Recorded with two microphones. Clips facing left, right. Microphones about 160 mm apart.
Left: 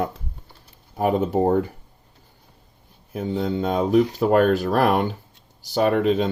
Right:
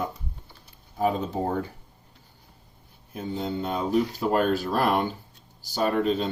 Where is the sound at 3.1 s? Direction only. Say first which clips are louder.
Left 6 dB; 85° left.